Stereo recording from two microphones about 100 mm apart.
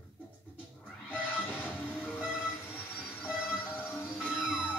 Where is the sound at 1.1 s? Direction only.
20° left (ahead or behind).